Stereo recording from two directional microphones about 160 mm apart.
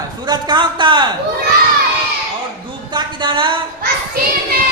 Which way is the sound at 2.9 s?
30° right (ahead or behind).